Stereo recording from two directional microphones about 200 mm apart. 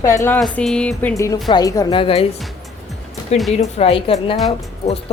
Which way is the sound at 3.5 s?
30° left (ahead or behind).